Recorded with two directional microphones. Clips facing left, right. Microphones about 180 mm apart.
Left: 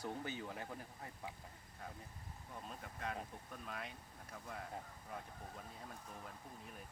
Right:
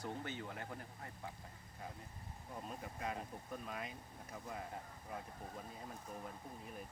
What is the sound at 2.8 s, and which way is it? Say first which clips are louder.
Speech: even; 5° right (ahead or behind).